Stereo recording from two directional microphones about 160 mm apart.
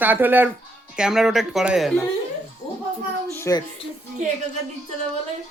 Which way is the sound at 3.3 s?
15° left (ahead or behind).